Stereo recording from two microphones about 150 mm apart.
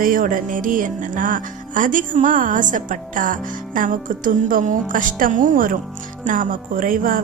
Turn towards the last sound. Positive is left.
turn(degrees=-70)  # may be behind; listen again after turning